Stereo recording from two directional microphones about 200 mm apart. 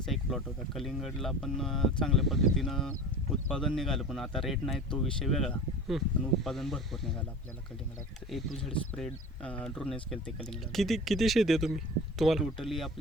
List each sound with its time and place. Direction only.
0.0 s speech: centre (ahead or behind)
8.3 s speech: centre (ahead or behind)